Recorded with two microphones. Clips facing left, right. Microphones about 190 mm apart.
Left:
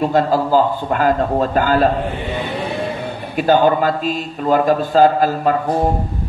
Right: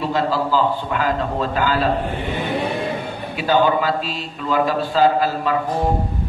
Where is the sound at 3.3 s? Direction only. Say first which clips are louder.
Left 4 dB; 50° left (ahead or behind).